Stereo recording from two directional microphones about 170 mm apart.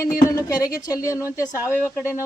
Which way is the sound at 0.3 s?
20° left (ahead or behind).